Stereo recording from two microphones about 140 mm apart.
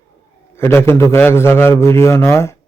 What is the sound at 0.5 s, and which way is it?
A man's voice, 20° left (ahead or behind).